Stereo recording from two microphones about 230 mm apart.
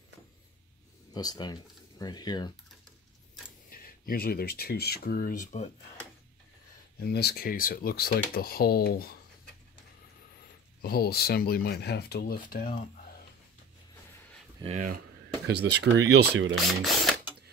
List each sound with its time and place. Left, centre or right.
1.1 s speech: centre
3.7 s speech: left
7.0 s speech: left
10.8 s speech: left
14.6 s speech: right
15.4 s speech: right
16.5 s ratchet: centre